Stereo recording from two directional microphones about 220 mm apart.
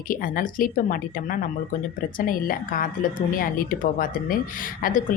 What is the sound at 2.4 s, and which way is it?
A woman's voice, 40° left (ahead or behind).